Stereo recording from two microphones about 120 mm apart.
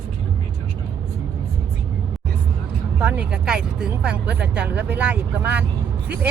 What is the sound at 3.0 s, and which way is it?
Speech, 10° right (ahead or behind).